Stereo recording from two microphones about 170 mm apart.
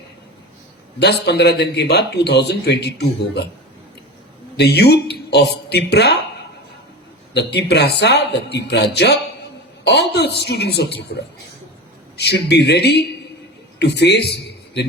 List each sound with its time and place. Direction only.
0.9 s a man's voice: 75° left (ahead or behind)
4.5 s a man's voice: 75° left (ahead or behind)
7.3 s a man's voice: 75° left (ahead or behind)
12.2 s a man's voice: 75° left (ahead or behind)
13.7 s a man's voice: 90° left